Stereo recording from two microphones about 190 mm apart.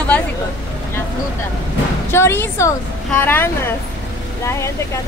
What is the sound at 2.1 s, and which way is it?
A woman's voice, 15° left (ahead or behind).